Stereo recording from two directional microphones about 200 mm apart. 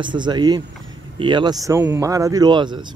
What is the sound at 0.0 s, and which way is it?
Speech, 25° right (ahead or behind).